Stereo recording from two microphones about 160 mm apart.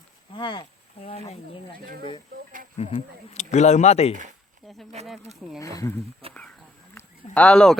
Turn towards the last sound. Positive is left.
turn(degrees=5)  # may be behind; listen again after turning